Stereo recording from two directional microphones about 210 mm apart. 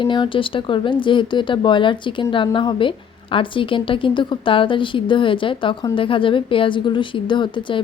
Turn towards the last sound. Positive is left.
turn(degrees=20)  # may be behind; listen again after turning